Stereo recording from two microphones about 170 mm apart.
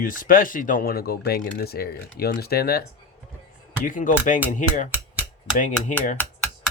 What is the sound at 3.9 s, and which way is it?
Speech, 50° left (ahead or behind).